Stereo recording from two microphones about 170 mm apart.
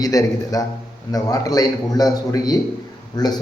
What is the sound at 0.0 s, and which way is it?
A man's voice, 20° left (ahead or behind).